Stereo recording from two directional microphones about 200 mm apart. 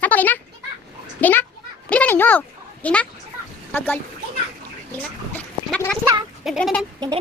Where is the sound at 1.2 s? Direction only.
10° left (ahead or behind).